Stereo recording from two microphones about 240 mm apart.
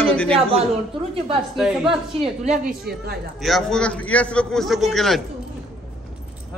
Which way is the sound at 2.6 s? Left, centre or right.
Right.